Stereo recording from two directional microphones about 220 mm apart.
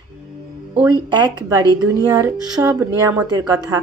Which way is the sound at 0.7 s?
15° right (ahead or behind).